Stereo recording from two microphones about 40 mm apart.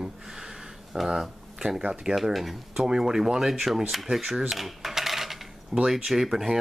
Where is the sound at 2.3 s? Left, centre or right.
Centre.